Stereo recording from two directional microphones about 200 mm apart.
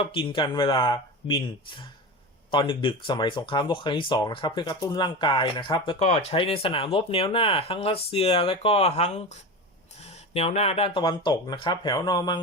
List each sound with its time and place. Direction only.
0.0 s speech: 25° left (ahead or behind)